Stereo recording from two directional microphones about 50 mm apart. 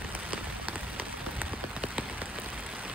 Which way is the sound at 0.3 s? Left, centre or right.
Right.